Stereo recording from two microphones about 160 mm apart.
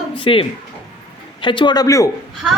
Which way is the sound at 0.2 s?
35° left (ahead or behind).